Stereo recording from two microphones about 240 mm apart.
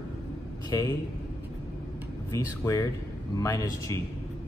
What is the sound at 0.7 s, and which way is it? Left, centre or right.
Speech, centre.